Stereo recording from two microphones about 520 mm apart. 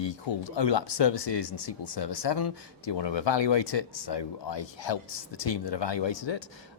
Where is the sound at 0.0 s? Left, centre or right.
Left.